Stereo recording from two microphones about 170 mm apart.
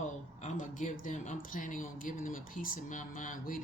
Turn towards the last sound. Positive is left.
turn(degrees=50)  # may be behind; listen again after turning